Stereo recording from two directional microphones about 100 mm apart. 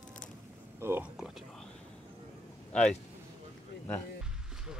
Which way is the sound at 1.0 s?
5° right (ahead or behind).